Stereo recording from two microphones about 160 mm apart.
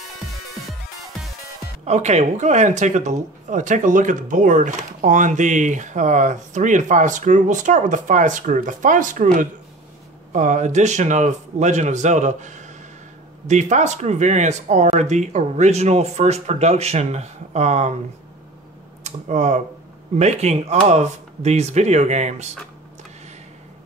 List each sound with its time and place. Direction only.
1.9 s speech: 45° right (ahead or behind)
19.0 s speech: 45° right (ahead or behind)